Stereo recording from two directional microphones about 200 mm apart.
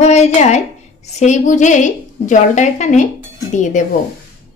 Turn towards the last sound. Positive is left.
turn(degrees=40)  # may be behind; listen again after turning